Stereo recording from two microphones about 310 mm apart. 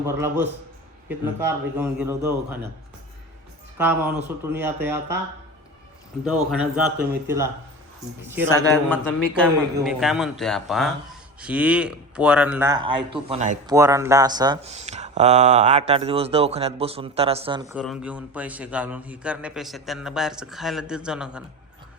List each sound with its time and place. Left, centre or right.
0.0 s a man's voice: centre
3.8 s a man's voice: centre
6.2 s a man's voice: centre
8.9 s a man's voice: centre; by 13.6 s right
13.7 s a man's voice: centre